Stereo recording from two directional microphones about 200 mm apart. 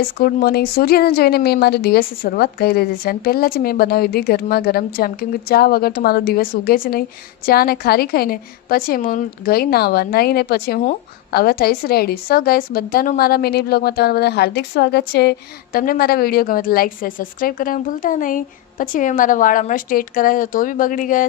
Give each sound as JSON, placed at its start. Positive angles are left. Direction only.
{"t": 0.2, "sound": "a woman's voice", "side_deg": 50}